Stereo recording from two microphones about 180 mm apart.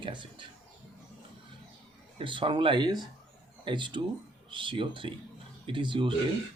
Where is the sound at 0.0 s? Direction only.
25° right (ahead or behind).